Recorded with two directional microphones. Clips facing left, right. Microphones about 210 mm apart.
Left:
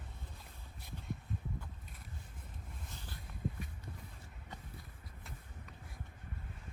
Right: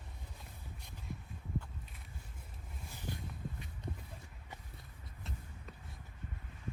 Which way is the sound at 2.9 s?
15° right (ahead or behind).